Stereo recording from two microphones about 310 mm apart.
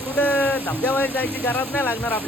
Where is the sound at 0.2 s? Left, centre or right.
Centre.